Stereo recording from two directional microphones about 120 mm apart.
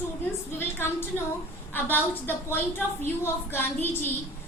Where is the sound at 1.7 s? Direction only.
15° left (ahead or behind).